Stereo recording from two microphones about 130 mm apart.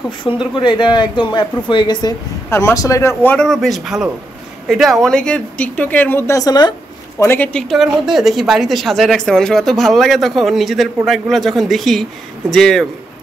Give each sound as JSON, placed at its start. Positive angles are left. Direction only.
{"t": 0.3, "sound": "a woman's voice", "side_deg": -5}
{"t": 0.6, "sound": "speech", "side_deg": 35}
{"t": 2.5, "sound": "speech", "side_deg": 25}
{"t": 3.4, "sound": "a woman's voice", "side_deg": 0}
{"t": 7.2, "sound": "speech", "side_deg": 15}
{"t": 7.6, "sound": "a woman's voice", "side_deg": 0}